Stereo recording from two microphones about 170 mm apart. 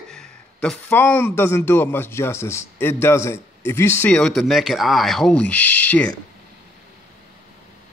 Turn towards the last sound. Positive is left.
turn(degrees=10)  # may be behind; listen again after turning